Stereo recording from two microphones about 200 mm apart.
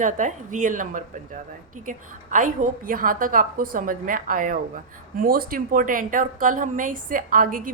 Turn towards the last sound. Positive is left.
turn(degrees=-45)  # may be behind; listen again after turning